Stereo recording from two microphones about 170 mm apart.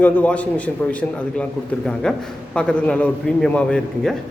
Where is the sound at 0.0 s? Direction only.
10° left (ahead or behind).